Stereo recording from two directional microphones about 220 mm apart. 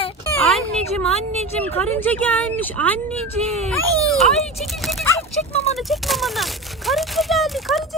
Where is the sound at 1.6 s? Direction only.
10° left (ahead or behind).